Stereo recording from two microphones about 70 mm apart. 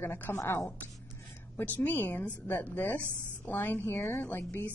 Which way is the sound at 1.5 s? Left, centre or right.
Left.